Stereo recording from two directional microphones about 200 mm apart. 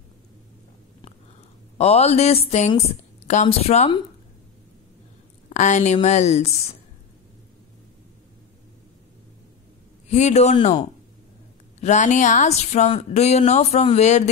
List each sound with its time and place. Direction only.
1.8 s speech: 30° left (ahead or behind)
5.5 s a woman's voice: 35° left (ahead or behind)
10.0 s speech: 35° left (ahead or behind)
11.8 s speech: 35° left (ahead or behind)